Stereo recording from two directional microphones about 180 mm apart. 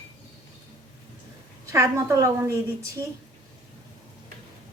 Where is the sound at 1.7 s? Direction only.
15° right (ahead or behind).